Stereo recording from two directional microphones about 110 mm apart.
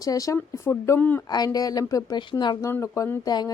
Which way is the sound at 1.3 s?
35° left (ahead or behind).